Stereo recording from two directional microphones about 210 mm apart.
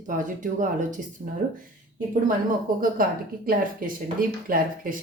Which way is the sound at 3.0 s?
40° right (ahead or behind).